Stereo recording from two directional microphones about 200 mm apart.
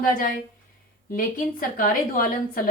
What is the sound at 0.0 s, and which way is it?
Speech, 45° left (ahead or behind).